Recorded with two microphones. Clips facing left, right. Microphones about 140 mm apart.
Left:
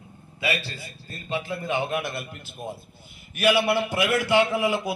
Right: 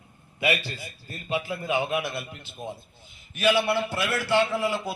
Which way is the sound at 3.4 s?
10° left (ahead or behind).